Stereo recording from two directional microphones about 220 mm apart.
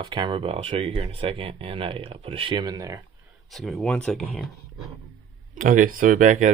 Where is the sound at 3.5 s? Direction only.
Centre (ahead or behind).